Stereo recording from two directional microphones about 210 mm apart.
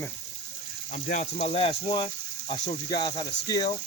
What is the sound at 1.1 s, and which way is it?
Speech, 35° left (ahead or behind).